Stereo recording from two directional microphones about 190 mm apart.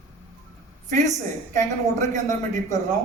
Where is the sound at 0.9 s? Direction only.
40° right (ahead or behind).